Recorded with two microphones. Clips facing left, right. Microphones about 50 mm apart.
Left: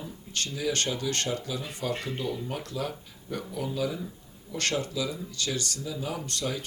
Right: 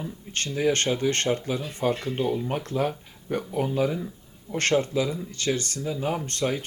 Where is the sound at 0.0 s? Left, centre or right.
Right.